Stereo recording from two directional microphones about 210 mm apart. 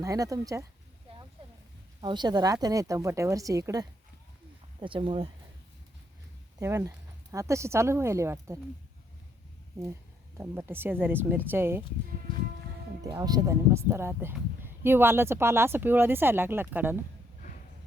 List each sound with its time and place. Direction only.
0.0 s speech: 15° right (ahead or behind)
2.0 s speech: 20° right (ahead or behind)
6.6 s speech: 15° right (ahead or behind)
10.3 s speech: 10° right (ahead or behind)
13.0 s speech: 15° right (ahead or behind)